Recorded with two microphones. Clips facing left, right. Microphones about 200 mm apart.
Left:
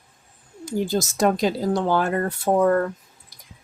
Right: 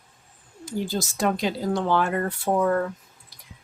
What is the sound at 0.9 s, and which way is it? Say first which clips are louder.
Speech: left 5 dB; 40° left (ahead or behind).